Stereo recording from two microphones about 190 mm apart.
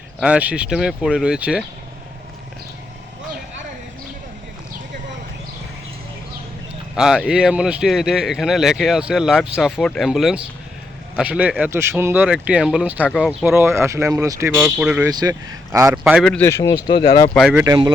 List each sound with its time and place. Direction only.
0.2 s speech: 5° right (ahead or behind)
6.9 s speech: 5° right (ahead or behind)
13.5 s speech: 10° right (ahead or behind)
15.1 s speech: 20° right (ahead or behind)
16.1 s speech: 5° left (ahead or behind)
16.5 s speech: 20° left (ahead or behind)
17.3 s speech: centre (ahead or behind)